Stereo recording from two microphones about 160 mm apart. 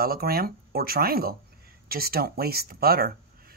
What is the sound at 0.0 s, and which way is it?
Speech, 70° right (ahead or behind).